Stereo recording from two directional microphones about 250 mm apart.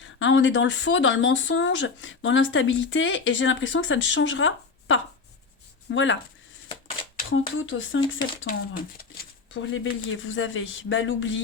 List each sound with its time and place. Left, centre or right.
0.0 s speech: left
7.2 s speech: left
9.5 s speech: left